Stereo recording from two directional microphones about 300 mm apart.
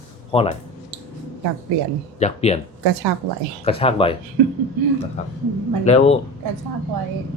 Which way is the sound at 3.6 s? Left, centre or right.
Centre.